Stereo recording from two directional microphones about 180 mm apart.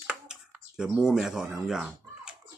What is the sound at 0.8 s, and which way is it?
Speech, 5° right (ahead or behind).